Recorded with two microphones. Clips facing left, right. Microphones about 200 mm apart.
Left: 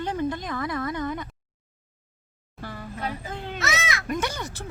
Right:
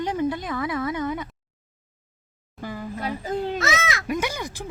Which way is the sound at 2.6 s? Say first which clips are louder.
Right 5 dB; 15° right (ahead or behind).